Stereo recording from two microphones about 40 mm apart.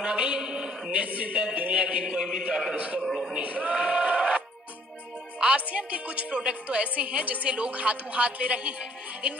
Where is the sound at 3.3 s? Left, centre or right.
Right.